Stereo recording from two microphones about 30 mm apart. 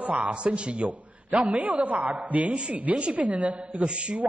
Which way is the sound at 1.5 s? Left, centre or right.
Right.